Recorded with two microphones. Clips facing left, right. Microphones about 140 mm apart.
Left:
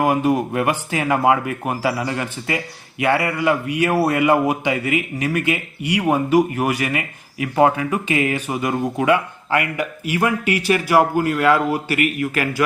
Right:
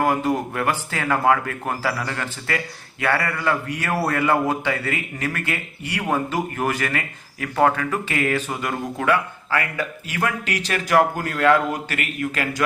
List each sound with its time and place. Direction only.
0.0 s a man's voice: 15° left (ahead or behind)